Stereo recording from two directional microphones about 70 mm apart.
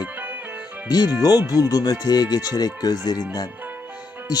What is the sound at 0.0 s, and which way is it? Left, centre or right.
Music, right.